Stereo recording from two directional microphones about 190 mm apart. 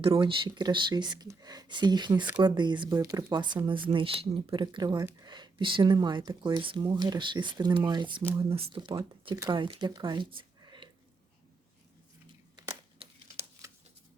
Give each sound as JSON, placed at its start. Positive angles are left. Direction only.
{"t": 0.0, "sound": "speech", "side_deg": -25}
{"t": 8.2, "sound": "speech", "side_deg": -10}
{"t": 8.4, "sound": "speech", "side_deg": -30}
{"t": 12.5, "sound": "crumpling", "side_deg": -20}